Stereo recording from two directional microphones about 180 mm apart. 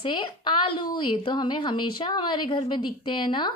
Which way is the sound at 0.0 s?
25° left (ahead or behind).